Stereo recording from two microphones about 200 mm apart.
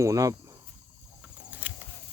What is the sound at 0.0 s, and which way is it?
Speech, 15° right (ahead or behind).